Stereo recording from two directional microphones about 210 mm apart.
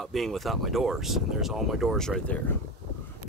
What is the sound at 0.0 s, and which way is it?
Speech, centre (ahead or behind).